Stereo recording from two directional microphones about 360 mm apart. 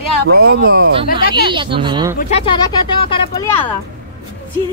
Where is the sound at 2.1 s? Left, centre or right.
Centre.